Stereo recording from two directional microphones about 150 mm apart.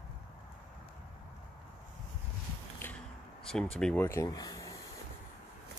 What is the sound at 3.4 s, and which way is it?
Speech, 5° left (ahead or behind).